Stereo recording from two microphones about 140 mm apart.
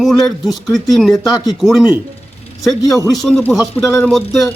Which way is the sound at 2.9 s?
Centre (ahead or behind).